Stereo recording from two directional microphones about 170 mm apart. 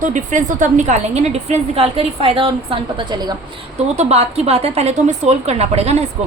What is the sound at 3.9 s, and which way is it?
A woman's voice, 40° right (ahead or behind).